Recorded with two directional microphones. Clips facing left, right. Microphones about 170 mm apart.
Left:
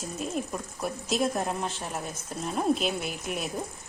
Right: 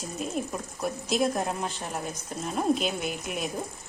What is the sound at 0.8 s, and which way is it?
Speech, centre (ahead or behind).